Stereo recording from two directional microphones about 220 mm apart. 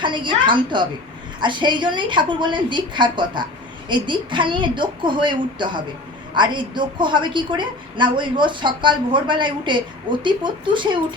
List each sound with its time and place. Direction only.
0.0 s a woman's voice: 20° right (ahead or behind)